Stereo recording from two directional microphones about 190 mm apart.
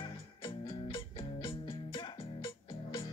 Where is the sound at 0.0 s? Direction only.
25° left (ahead or behind).